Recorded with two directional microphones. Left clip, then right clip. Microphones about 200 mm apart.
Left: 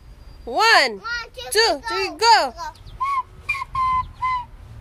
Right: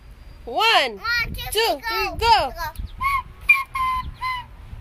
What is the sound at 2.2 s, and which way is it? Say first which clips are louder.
Speech: left 3 dB; 20° left (ahead or behind).